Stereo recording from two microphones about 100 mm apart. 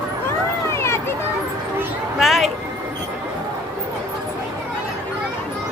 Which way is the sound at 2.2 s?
Centre (ahead or behind).